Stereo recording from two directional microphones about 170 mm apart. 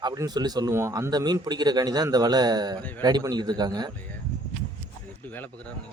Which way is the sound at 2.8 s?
10° left (ahead or behind).